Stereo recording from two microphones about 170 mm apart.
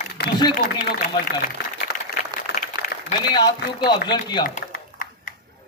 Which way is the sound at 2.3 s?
25° right (ahead or behind).